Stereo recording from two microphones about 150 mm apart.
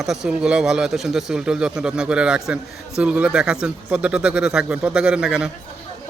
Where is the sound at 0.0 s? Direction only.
5° right (ahead or behind).